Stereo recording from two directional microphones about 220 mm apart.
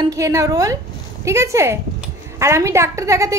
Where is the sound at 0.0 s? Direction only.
15° right (ahead or behind).